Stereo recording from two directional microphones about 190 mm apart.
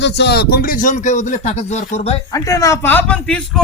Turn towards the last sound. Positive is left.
turn(degrees=5)  # may be behind; listen again after turning